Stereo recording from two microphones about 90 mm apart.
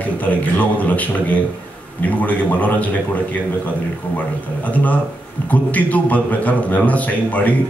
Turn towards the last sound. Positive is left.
turn(degrees=15)  # may be behind; listen again after turning